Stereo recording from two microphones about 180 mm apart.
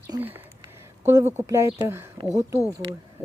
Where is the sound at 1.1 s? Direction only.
20° right (ahead or behind).